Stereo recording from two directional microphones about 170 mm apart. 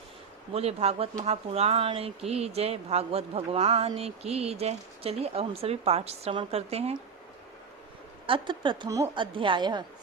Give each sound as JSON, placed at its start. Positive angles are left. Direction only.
{"t": 0.5, "sound": "speech", "side_deg": -35}
{"t": 8.3, "sound": "a woman's voice", "side_deg": -30}